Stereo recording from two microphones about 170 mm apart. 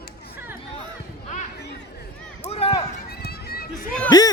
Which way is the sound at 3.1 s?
65° left (ahead or behind).